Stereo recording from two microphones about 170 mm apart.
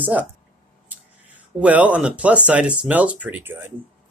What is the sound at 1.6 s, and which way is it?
Speech, 10° right (ahead or behind).